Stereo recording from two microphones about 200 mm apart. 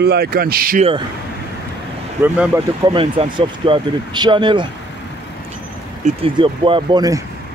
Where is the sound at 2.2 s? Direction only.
10° right (ahead or behind).